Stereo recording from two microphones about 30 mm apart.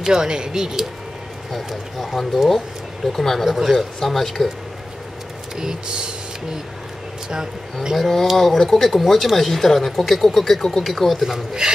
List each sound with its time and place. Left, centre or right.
0.0 s speech: right
1.7 s speech: centre
3.4 s speech: centre
3.7 s speech: centre
5.6 s speech: right
8.0 s speech: centre
11.2 s speech: centre